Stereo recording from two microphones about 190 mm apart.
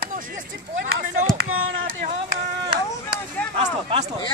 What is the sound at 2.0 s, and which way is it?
Speech, 45° right (ahead or behind).